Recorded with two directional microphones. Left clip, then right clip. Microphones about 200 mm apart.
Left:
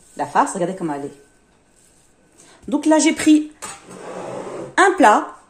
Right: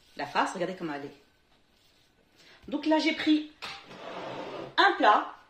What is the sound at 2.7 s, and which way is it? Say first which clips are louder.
Speech: left 11 dB; 40° left (ahead or behind).